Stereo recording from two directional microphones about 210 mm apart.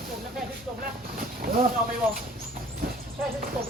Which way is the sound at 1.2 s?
40° right (ahead or behind).